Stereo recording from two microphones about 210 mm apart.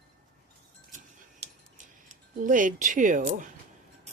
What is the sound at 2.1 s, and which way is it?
Speech, 35° right (ahead or behind).